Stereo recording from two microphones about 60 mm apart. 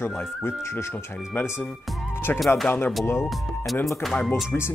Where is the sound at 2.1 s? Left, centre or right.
Left.